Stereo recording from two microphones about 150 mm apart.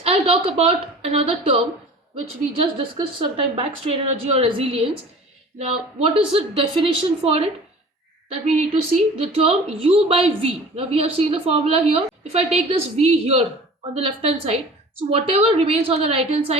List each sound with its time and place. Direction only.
0.0 s a woman's voice: 40° right (ahead or behind)